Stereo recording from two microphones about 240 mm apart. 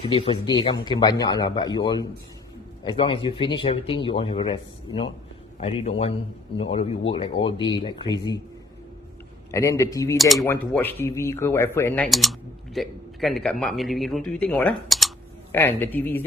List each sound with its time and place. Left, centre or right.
0.0 s speech: left
9.5 s speech: centre
10.2 s speech: centre